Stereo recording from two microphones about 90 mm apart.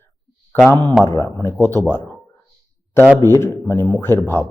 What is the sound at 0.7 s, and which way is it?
Speech, 25° left (ahead or behind).